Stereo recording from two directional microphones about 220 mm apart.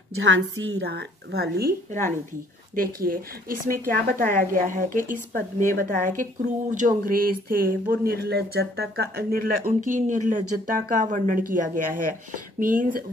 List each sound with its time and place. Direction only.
0.2 s speech: 60° right (ahead or behind); by 13.0 s 40° right (ahead or behind)